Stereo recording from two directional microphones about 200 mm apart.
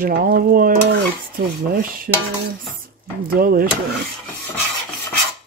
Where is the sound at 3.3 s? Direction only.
45° right (ahead or behind).